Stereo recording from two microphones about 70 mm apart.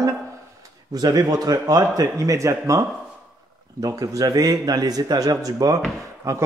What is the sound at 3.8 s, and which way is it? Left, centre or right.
A man's voice, right.